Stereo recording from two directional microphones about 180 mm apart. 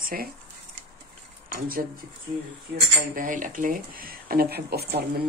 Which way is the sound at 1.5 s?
55° right (ahead or behind).